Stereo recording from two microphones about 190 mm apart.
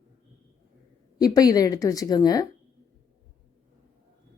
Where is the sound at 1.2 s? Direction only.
20° left (ahead or behind).